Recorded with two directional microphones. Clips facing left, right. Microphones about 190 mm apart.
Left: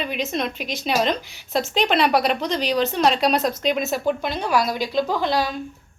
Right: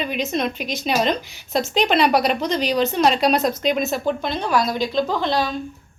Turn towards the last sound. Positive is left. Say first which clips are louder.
# right 1 dB
turn(degrees=10)  # may be behind; listen again after turning